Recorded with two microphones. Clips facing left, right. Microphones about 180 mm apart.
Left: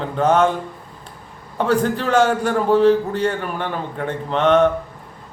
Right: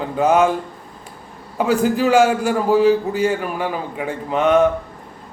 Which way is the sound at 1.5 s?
5° right (ahead or behind).